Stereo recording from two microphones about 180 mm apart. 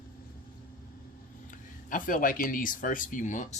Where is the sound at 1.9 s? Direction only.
50° left (ahead or behind).